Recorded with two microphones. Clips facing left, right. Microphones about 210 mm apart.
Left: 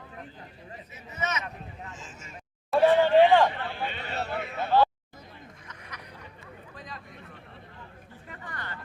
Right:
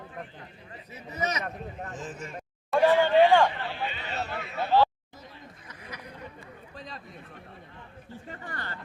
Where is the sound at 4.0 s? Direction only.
55° left (ahead or behind).